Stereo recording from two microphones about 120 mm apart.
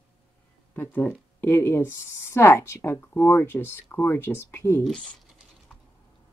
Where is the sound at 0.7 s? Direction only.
20° left (ahead or behind).